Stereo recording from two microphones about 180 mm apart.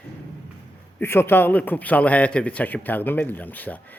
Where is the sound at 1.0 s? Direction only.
10° left (ahead or behind).